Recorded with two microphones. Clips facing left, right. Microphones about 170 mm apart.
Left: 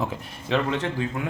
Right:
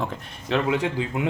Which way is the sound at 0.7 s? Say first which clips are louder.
Right 2 dB; 15° right (ahead or behind).